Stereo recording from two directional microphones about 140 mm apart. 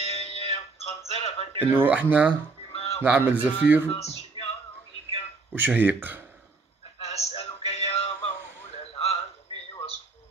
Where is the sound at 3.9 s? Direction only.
50° left (ahead or behind).